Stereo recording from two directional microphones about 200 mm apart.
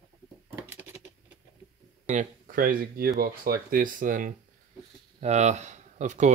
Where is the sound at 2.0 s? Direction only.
40° right (ahead or behind).